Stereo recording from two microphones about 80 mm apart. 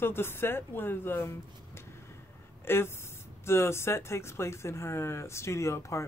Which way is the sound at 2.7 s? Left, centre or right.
Left.